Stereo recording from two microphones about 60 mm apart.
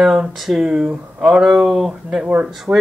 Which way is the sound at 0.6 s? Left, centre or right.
Centre.